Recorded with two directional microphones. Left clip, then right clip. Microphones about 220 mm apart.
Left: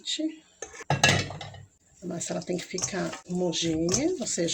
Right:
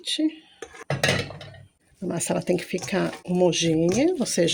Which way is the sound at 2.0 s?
50° right (ahead or behind).